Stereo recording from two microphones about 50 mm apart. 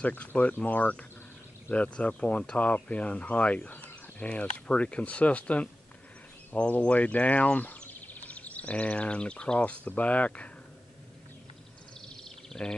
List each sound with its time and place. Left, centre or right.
0.0 s speech: left
6.8 s speech: left
12.2 s bird: centre